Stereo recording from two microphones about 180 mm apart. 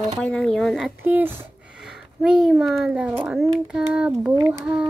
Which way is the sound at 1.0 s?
10° right (ahead or behind).